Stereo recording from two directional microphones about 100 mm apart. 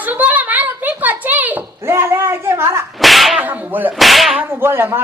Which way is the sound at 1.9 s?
25° right (ahead or behind).